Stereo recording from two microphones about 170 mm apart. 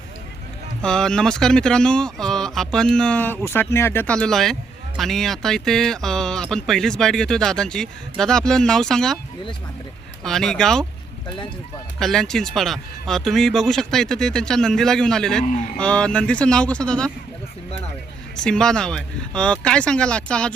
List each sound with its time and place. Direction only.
0.8 s speech: 5° left (ahead or behind)
10.2 s speech: 5° left (ahead or behind)
11.9 s speech: centre (ahead or behind)
18.4 s speech: 5° left (ahead or behind)